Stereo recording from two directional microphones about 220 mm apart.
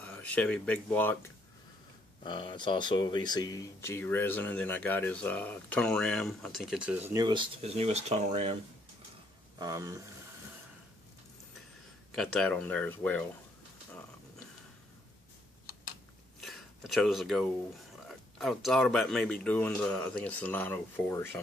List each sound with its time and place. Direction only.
0.0 s speech: 5° left (ahead or behind)
2.2 s speech: 20° left (ahead or behind); by 8.5 s 30° right (ahead or behind)
9.6 s speech: 15° right (ahead or behind)
12.2 s speech: 5° left (ahead or behind)
16.3 s a sound: centre (ahead or behind)
18.0 s speech: centre (ahead or behind)